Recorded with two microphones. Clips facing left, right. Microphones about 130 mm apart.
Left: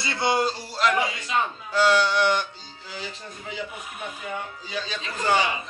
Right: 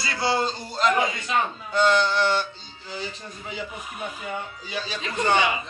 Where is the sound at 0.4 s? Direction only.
5° left (ahead or behind).